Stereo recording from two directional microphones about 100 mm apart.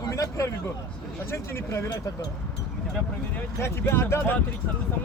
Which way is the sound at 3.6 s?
25° left (ahead or behind).